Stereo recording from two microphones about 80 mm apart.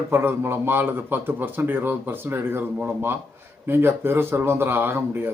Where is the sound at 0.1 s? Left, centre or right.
Right.